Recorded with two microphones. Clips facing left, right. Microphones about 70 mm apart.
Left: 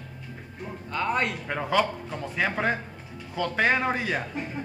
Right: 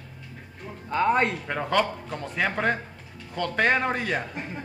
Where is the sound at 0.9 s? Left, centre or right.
Right.